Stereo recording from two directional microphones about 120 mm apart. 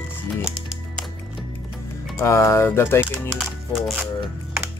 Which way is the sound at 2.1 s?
25° left (ahead or behind).